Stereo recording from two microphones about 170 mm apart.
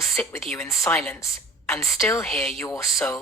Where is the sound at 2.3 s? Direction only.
Centre (ahead or behind).